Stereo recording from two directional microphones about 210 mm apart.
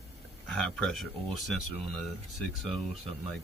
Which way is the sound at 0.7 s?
Centre (ahead or behind).